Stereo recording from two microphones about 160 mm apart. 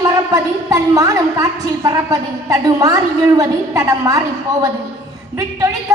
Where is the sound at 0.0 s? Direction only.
20° right (ahead or behind).